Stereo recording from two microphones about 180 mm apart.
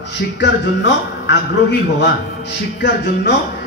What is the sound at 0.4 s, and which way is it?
A man's voice, 75° left (ahead or behind).